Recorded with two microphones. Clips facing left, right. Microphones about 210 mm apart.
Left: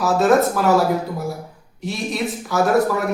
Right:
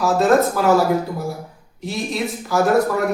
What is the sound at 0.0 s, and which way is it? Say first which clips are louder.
A man's voice: even; centre (ahead or behind).